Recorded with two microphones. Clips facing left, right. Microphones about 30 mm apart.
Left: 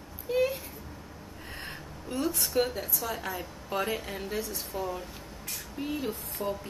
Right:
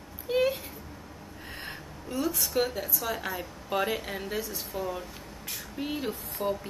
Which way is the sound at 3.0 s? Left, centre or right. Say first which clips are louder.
Right 2 dB; right.